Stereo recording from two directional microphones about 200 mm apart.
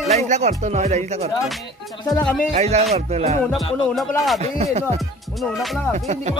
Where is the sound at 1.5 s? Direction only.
Centre (ahead or behind).